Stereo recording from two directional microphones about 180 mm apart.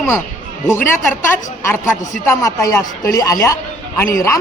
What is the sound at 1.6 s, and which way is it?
A man's voice, 15° left (ahead or behind).